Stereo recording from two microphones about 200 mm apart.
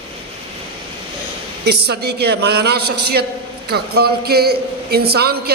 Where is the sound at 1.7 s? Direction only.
55° right (ahead or behind).